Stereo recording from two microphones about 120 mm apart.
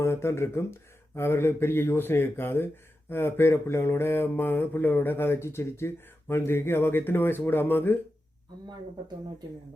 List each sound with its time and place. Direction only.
0.0 s mantra: 25° left (ahead or behind)